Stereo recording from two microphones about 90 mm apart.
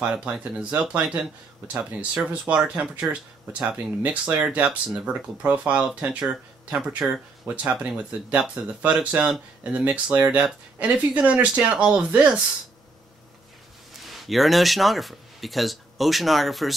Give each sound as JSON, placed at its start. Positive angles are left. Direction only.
{"t": 0.0, "sound": "speech", "side_deg": -10}
{"t": 14.0, "sound": "speech", "side_deg": 0}